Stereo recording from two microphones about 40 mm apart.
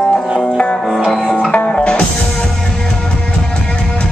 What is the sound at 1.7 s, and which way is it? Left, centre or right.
Music, left.